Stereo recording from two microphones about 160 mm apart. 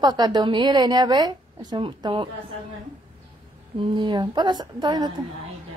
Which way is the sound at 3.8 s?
30° right (ahead or behind).